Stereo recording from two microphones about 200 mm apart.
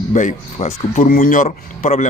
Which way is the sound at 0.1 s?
35° left (ahead or behind).